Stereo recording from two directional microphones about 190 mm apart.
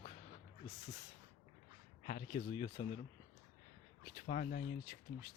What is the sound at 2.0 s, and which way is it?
Speech, 45° left (ahead or behind).